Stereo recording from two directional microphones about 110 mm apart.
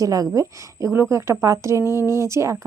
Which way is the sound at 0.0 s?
35° right (ahead or behind).